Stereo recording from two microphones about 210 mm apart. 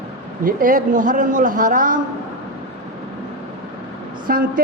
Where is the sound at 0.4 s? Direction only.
40° right (ahead or behind).